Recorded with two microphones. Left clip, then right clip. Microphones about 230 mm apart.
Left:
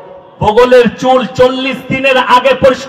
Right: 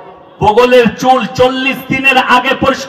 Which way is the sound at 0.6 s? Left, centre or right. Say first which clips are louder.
Left 3 dB; left.